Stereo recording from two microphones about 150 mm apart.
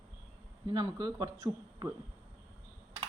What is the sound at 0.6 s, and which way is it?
Speech, 30° right (ahead or behind).